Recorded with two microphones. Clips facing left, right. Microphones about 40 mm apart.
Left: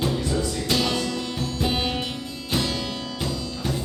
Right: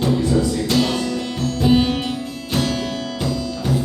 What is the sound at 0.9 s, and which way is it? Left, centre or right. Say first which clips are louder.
Music: right 4 dB; centre.